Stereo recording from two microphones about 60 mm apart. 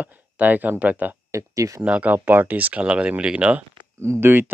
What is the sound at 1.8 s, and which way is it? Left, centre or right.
Speech, right.